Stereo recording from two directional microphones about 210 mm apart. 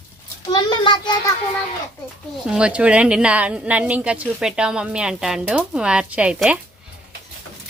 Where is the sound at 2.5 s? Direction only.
5° right (ahead or behind).